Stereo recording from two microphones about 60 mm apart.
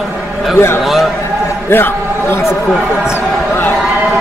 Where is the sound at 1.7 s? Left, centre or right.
Left.